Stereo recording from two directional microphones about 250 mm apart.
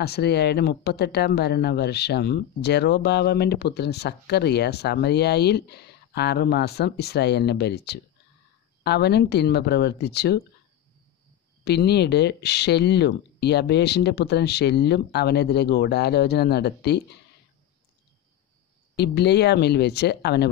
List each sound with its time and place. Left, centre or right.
0.0 s speech: left
11.6 s speech: left
18.9 s speech: left